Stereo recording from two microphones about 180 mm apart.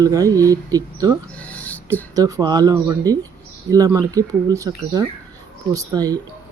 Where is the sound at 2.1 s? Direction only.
20° right (ahead or behind).